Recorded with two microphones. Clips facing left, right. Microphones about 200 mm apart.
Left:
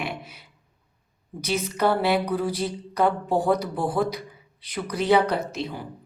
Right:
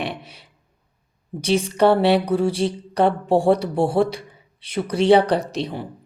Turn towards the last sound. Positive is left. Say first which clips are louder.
# right 4 dB
turn(degrees=-30)  # may be behind; listen again after turning